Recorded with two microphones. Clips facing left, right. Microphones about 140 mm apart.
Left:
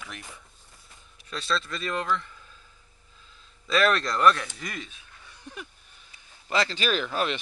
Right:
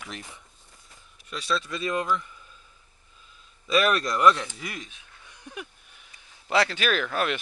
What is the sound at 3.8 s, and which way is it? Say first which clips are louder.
Speech: even; 15° right (ahead or behind).